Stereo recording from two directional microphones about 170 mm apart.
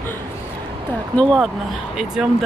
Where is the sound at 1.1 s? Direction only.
Centre (ahead or behind).